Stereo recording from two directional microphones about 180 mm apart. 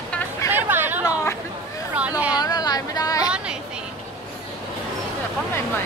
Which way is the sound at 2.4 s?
20° left (ahead or behind).